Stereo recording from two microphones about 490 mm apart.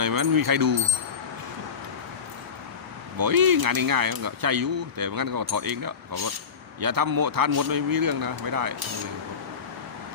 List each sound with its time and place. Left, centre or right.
0.0 s speech: right
3.2 s speech: right